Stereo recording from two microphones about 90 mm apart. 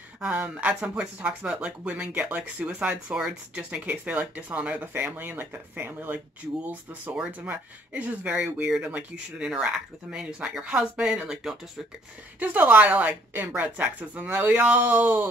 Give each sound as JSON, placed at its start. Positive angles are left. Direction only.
{"t": 0.2, "sound": "speech", "side_deg": -15}
{"t": 12.4, "sound": "speech", "side_deg": -15}